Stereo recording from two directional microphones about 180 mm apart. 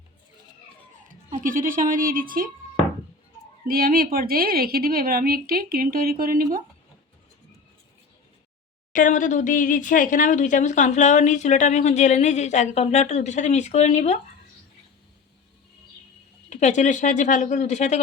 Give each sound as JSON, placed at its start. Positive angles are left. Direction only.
{"t": 1.0, "sound": "a woman's voice", "side_deg": -50}
{"t": 3.7, "sound": "a woman's voice", "side_deg": -55}
{"t": 8.9, "sound": "speech", "side_deg": 45}
{"t": 16.5, "sound": "speech", "side_deg": 40}